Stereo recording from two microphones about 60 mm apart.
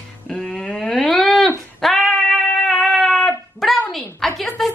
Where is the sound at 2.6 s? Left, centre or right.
Centre.